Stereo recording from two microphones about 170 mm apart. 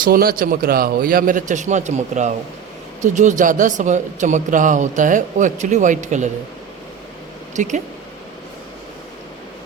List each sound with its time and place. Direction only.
0.0 s a man's voice: 60° right (ahead or behind)
7.5 s speech: 45° right (ahead or behind)